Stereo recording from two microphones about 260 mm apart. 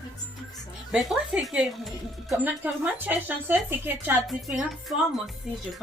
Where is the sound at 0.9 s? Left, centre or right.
Centre.